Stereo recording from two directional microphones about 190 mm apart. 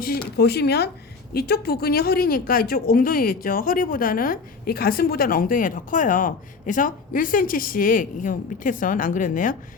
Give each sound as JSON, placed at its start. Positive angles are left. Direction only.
{"t": 0.0, "sound": "speech", "side_deg": 55}